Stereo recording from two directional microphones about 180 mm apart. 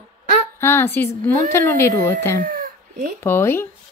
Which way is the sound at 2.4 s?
55° right (ahead or behind).